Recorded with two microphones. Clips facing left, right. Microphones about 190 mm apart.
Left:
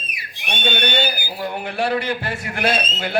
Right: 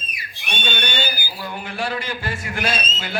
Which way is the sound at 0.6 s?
55° left (ahead or behind).